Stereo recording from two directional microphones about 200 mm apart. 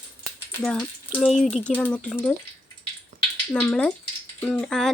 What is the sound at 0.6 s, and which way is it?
Speech, 5° left (ahead or behind).